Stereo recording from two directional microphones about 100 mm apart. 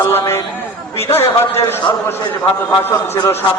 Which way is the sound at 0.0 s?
25° left (ahead or behind).